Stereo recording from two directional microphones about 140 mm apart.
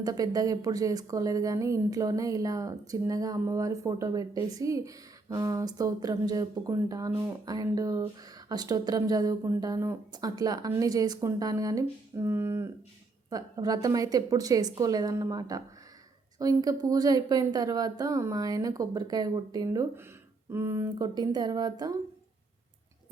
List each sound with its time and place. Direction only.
0.0 s speech: 25° right (ahead or behind)